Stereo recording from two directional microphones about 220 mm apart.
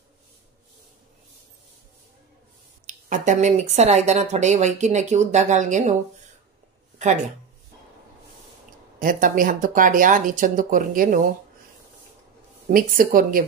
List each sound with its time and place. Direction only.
2.9 s speech: 35° right (ahead or behind)
9.0 s speech: 40° right (ahead or behind)
12.6 s speech: 40° right (ahead or behind)